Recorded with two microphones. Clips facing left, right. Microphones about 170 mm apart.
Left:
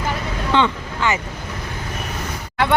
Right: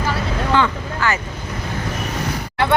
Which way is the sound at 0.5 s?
20° left (ahead or behind).